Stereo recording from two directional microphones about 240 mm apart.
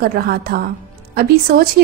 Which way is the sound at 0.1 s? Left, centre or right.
Right.